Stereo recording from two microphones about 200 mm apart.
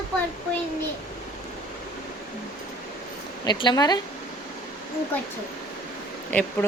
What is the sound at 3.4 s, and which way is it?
Speech, 20° left (ahead or behind).